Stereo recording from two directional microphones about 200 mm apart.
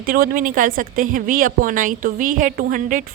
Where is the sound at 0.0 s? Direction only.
45° right (ahead or behind).